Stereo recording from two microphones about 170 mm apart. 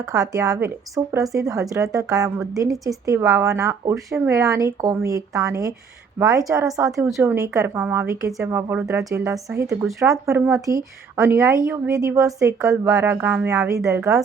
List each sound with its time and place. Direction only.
0.0 s speech: 20° right (ahead or behind)
9.6 s speech: centre (ahead or behind)
10.1 s speech: 15° right (ahead or behind)